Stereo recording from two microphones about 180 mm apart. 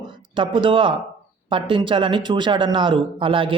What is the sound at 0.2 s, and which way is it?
Speech, 30° right (ahead or behind).